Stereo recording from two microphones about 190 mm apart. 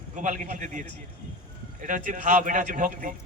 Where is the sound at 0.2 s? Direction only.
40° right (ahead or behind).